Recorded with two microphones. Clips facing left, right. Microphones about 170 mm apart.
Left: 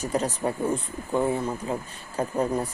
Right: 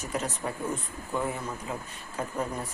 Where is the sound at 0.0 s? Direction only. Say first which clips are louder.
Left 6 dB; 35° left (ahead or behind).